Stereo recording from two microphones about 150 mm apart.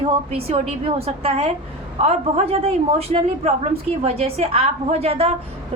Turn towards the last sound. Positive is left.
turn(degrees=-40)  # may be behind; listen again after turning